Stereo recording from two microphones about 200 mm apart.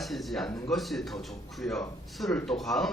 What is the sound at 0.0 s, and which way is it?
Speech, centre (ahead or behind).